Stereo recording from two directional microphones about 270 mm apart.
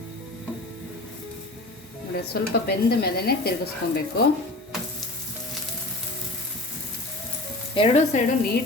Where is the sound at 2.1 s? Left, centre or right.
Left.